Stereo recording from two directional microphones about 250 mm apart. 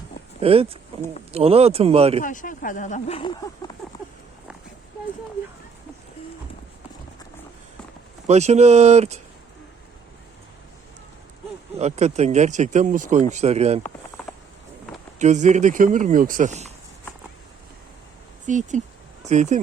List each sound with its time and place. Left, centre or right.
0.3 s speech: right
2.2 s speech: left
3.8 s a sound: centre
8.3 s speech: right
11.8 s speech: right
14.2 s a sound: centre
15.2 s speech: right
18.4 s speech: right